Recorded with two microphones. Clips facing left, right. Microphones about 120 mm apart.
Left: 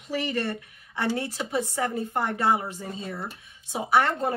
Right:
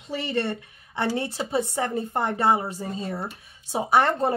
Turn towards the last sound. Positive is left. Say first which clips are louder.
# right 2 dB
turn(degrees=-30)  # may be behind; listen again after turning